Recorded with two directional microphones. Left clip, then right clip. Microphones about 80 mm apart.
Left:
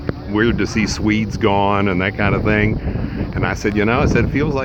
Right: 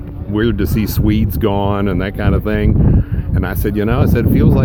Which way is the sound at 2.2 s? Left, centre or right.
Right.